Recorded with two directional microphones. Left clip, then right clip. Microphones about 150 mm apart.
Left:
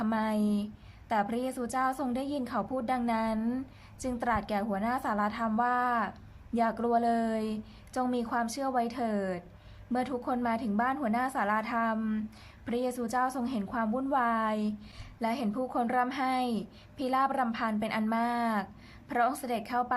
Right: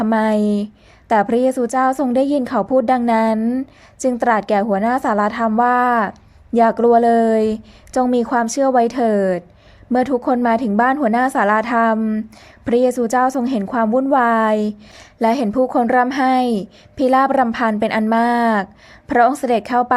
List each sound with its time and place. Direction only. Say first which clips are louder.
0.0 s a woman's voice: right 14 dB; 45° right (ahead or behind)